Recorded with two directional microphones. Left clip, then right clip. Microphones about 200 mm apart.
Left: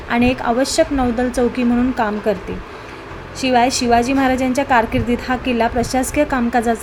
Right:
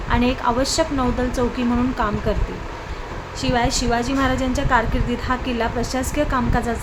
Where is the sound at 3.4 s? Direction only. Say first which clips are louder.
Left 6 dB; 15° left (ahead or behind).